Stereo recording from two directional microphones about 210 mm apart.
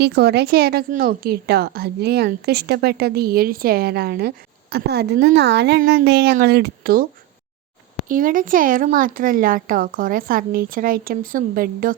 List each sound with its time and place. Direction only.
0.0 s a woman's voice: 50° right (ahead or behind)